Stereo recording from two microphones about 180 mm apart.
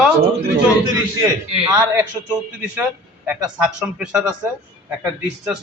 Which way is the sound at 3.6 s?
5° right (ahead or behind).